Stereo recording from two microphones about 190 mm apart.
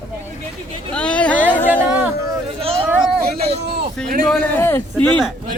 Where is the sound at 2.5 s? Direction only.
30° right (ahead or behind).